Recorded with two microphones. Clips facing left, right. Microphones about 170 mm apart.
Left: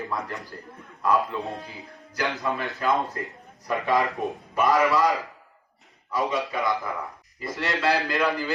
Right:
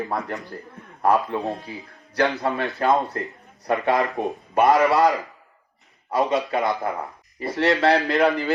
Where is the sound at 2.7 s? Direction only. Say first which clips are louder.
Right 5 dB; 65° right (ahead or behind).